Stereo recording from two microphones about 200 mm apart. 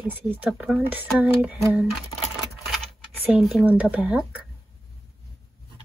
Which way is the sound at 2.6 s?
Centre (ahead or behind).